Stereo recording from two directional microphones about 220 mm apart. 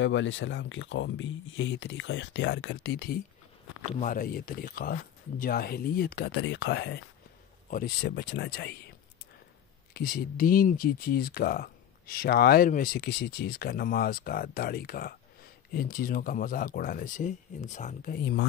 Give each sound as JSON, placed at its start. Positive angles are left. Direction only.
{"t": 0.0, "sound": "speech", "side_deg": 60}
{"t": 3.8, "sound": "speech", "side_deg": 35}
{"t": 9.9, "sound": "speech", "side_deg": 40}